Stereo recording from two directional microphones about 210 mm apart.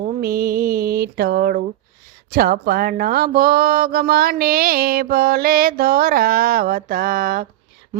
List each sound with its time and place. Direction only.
0.0 s speech: 45° right (ahead or behind)
2.3 s mantra: 45° right (ahead or behind)